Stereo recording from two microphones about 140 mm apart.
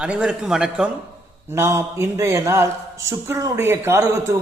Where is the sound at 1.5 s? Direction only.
20° right (ahead or behind).